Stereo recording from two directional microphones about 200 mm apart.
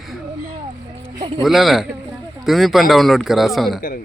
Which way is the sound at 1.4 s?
Centre (ahead or behind).